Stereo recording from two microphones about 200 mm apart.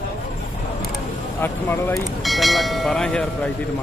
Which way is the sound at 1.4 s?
10° left (ahead or behind).